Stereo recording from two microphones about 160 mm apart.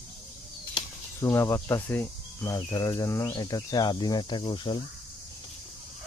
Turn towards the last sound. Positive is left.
turn(degrees=30)  # may be behind; listen again after turning